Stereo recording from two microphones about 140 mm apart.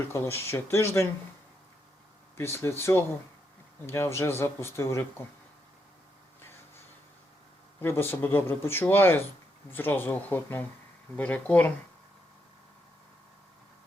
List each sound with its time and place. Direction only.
0.1 s speech: 20° left (ahead or behind)
2.4 s speech: 20° left (ahead or behind)
7.8 s speech: 15° left (ahead or behind)